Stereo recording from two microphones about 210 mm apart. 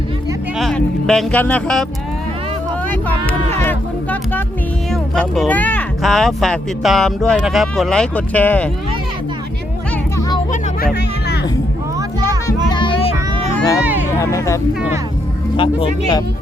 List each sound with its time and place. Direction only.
0.6 s speech: centre (ahead or behind)
2.9 s speech: 10° left (ahead or behind)
10.2 s music: 20° left (ahead or behind)
12.7 s music: 25° left (ahead or behind)
13.8 s a sound: 10° right (ahead or behind)
14.1 s speech: 15° left (ahead or behind)
15.5 s speech: 25° left (ahead or behind)